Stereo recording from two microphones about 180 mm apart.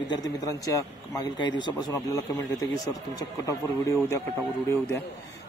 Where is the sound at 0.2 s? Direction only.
20° left (ahead or behind).